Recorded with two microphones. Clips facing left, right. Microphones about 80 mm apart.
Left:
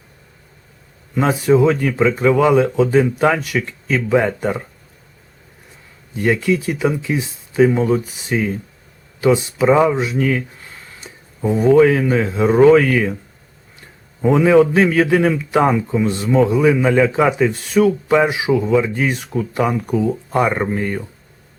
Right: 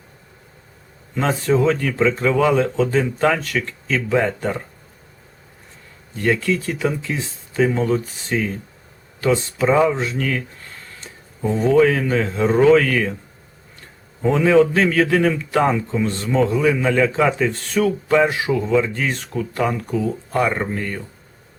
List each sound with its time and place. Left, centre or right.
1.1 s a man's voice: centre
6.1 s a man's voice: centre
14.2 s a man's voice: centre